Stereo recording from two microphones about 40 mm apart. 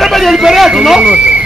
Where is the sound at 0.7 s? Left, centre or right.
Centre.